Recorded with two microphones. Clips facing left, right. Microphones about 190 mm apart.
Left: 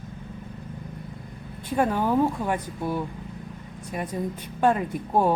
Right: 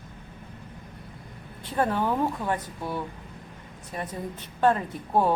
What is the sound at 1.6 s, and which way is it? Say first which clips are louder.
Speech: left 2 dB; 10° left (ahead or behind).